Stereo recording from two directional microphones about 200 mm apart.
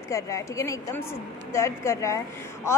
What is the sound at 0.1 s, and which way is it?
A woman's voice, 15° left (ahead or behind).